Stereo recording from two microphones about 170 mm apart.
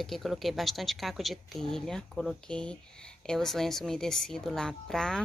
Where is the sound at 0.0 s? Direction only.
Centre (ahead or behind).